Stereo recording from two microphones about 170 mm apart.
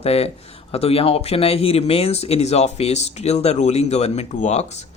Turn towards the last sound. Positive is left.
turn(degrees=40)  # may be behind; listen again after turning